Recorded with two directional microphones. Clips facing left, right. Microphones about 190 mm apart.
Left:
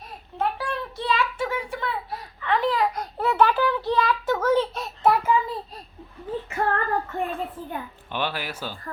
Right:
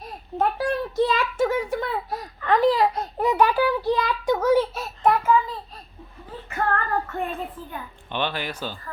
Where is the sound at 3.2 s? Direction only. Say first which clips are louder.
Right 1 dB; 15° right (ahead or behind).